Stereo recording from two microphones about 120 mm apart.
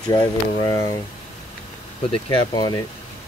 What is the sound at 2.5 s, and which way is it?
Speech, 40° left (ahead or behind).